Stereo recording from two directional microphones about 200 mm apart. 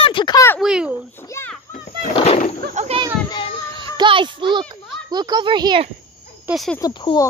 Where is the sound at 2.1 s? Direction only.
30° left (ahead or behind).